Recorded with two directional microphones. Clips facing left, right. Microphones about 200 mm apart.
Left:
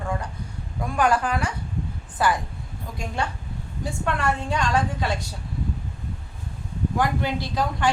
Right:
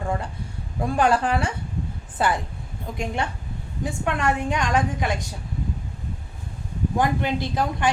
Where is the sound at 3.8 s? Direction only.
15° right (ahead or behind).